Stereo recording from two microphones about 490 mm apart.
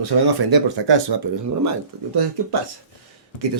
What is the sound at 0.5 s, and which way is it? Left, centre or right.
Speech, right.